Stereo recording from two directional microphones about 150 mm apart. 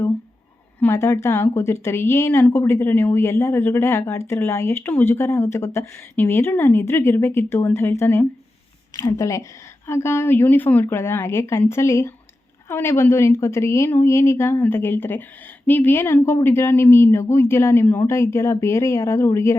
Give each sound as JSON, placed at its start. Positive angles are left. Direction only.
{"t": 0.8, "sound": "speech", "side_deg": 20}